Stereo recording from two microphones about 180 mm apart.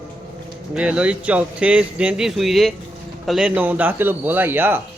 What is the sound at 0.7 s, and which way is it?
A man's voice, 5° right (ahead or behind).